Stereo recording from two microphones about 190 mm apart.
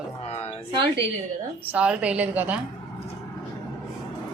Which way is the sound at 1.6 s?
5° right (ahead or behind).